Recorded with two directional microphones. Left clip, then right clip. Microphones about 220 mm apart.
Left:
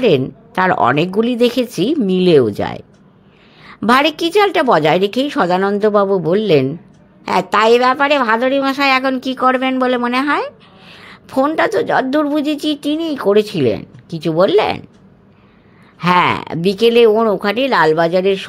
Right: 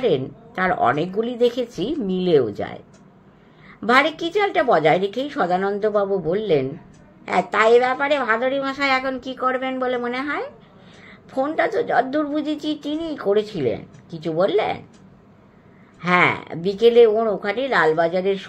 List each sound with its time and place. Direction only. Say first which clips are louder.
0.0 s a woman's voice: left 7 dB; 45° left (ahead or behind)
16.0 s a woman's voice: left 5 dB; 50° left (ahead or behind)